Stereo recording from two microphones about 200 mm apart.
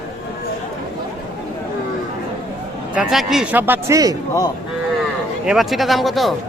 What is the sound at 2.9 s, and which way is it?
A man's voice, centre (ahead or behind).